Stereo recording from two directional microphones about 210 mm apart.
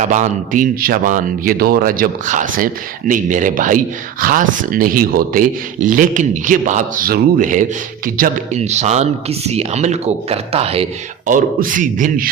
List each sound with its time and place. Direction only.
0.0 s speech: 35° right (ahead or behind)
11.3 s speech: 40° right (ahead or behind)